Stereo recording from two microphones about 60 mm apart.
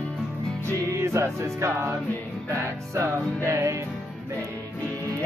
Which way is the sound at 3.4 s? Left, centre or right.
Right.